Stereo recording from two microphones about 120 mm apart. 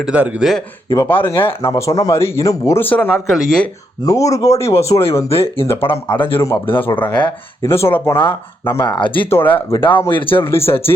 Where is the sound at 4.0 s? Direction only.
25° left (ahead or behind).